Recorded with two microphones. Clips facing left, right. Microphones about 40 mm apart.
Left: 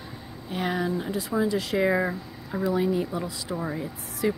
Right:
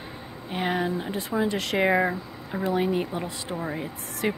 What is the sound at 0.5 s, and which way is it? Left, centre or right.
Speech, right.